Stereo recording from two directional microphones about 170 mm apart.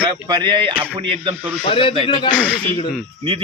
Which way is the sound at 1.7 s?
30° left (ahead or behind).